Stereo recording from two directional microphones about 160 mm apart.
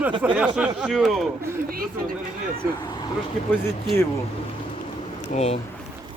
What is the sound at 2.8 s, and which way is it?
Speech, 25° left (ahead or behind).